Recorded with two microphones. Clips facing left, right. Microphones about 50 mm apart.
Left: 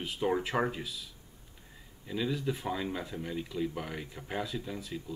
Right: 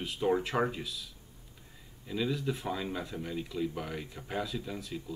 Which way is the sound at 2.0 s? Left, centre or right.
Centre.